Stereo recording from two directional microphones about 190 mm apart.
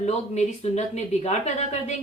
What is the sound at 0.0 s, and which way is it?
Speech, 35° left (ahead or behind).